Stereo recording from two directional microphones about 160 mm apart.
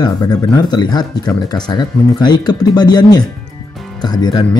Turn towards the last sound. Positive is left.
turn(degrees=25)  # may be behind; listen again after turning